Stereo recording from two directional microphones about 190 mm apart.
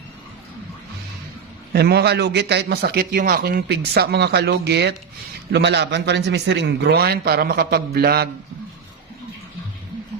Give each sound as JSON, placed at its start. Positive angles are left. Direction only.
{"t": 1.7, "sound": "a man's voice", "side_deg": -55}